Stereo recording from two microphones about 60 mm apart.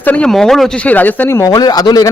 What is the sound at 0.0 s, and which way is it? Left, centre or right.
Speech, left.